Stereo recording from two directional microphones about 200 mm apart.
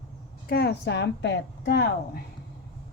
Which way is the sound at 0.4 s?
50° left (ahead or behind).